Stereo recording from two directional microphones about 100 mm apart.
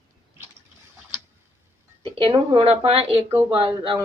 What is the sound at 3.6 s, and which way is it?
Speech, 55° right (ahead or behind).